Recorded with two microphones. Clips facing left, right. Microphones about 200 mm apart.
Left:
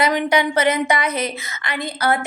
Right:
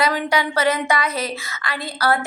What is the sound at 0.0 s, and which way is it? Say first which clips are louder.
A woman's voice: left 2 dB; 20° left (ahead or behind).